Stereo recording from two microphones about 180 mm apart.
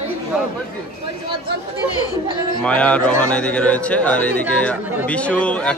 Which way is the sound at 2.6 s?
5° left (ahead or behind).